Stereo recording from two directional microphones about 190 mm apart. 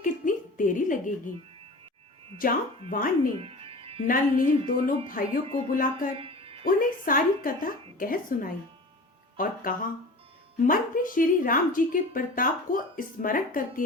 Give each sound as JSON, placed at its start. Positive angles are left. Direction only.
{"t": 0.0, "sound": "a sound", "side_deg": 45}
{"t": 2.9, "sound": "a woman's voice", "side_deg": 45}
{"t": 3.3, "sound": "music", "side_deg": -30}
{"t": 4.0, "sound": "a woman's voice", "side_deg": 45}
{"t": 6.1, "sound": "a sound", "side_deg": -30}
{"t": 6.7, "sound": "a woman's voice", "side_deg": 45}